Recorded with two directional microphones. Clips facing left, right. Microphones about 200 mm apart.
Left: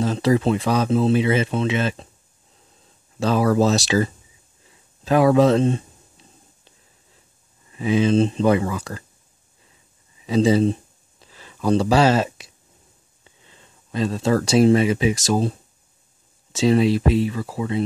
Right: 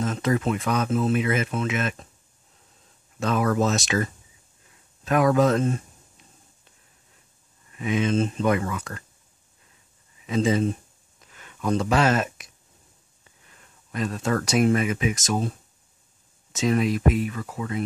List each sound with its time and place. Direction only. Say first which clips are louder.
0.0 s speech: left 5 dB; 30° left (ahead or behind)
3.2 s speech: left 5 dB; 30° left (ahead or behind)
4.6 s a sound: left 5 dB; 30° left (ahead or behind)
7.7 s speech: left 5 dB; 30° left (ahead or behind)
10.2 s a sound: left 5 dB; 35° left (ahead or behind)
13.2 s speech: left 4 dB; 25° left (ahead or behind)
16.5 s speech: left 5 dB; 30° left (ahead or behind)